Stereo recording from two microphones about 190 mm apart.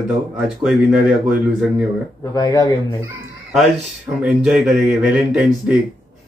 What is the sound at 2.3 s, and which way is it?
Speech, 20° left (ahead or behind).